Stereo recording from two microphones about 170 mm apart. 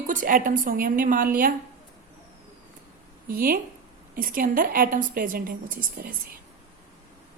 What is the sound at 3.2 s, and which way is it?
A woman's voice, 60° right (ahead or behind).